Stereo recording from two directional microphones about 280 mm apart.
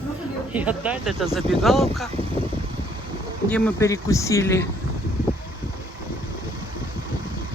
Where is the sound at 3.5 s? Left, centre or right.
Centre.